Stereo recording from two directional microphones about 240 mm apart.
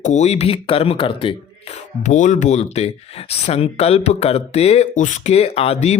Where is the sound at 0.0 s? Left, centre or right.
Left.